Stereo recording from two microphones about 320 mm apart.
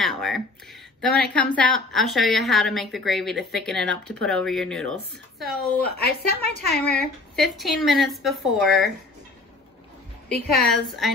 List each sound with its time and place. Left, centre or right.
0.0 s a sound: centre
1.0 s a woman's voice: centre
5.9 s a woman's voice: left
7.3 s a woman's voice: centre
10.2 s a woman's voice: centre